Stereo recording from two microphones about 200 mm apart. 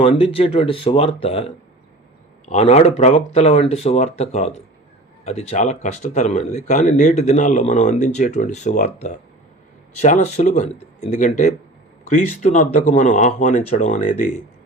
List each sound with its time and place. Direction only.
0.0 s speech: 30° left (ahead or behind)
2.5 s speech: 35° left (ahead or behind)